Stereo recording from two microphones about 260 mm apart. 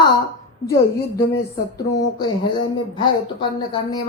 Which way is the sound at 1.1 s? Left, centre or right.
Centre.